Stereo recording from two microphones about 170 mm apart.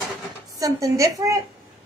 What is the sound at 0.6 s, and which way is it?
Speech, 20° right (ahead or behind).